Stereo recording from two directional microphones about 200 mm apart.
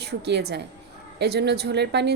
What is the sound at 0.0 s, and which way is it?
A woman's voice, 55° right (ahead or behind).